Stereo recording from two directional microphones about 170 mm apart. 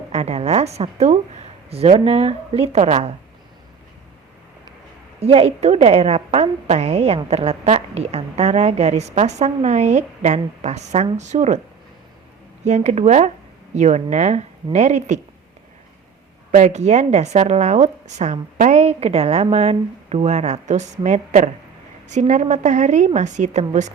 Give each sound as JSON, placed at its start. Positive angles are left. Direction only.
{"t": 0.1, "sound": "a woman's voice", "side_deg": -40}
{"t": 5.2, "sound": "a woman's voice", "side_deg": -35}
{"t": 12.6, "sound": "a woman's voice", "side_deg": -40}
{"t": 16.5, "sound": "a woman's voice", "side_deg": -45}